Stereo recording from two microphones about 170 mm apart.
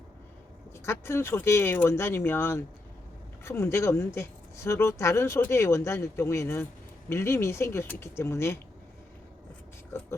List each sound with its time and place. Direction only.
0.9 s speech: 15° left (ahead or behind)